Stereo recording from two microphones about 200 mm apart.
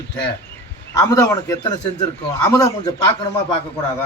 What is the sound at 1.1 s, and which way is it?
A man's voice, 15° left (ahead or behind).